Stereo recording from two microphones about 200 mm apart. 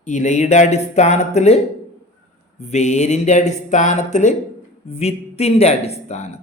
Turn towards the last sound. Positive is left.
turn(degrees=35)  # may be behind; listen again after turning